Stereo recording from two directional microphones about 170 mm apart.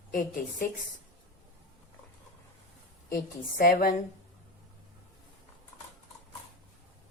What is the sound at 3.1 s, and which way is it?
Speech, 55° left (ahead or behind).